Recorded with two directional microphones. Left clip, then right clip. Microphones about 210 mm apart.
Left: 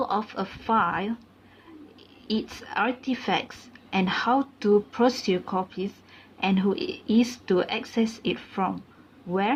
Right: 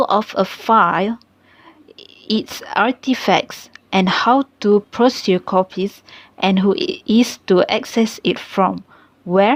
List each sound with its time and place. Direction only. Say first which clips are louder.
0.0 s a woman's voice: right 11 dB; 40° right (ahead or behind)